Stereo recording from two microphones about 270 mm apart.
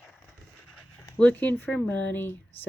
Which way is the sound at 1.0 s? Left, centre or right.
Centre.